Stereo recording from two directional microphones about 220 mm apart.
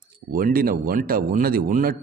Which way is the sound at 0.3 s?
40° right (ahead or behind).